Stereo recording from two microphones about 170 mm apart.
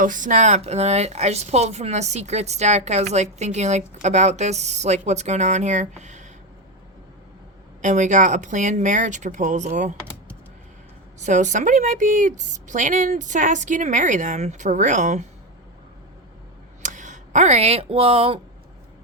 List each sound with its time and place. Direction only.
0.0 s speech: 50° right (ahead or behind)
7.8 s a woman's voice: 45° right (ahead or behind)
11.2 s a woman's voice: 45° right (ahead or behind)
16.8 s speech: 45° right (ahead or behind)